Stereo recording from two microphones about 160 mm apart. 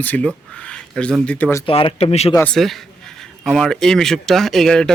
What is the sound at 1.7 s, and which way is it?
Speech, 35° left (ahead or behind).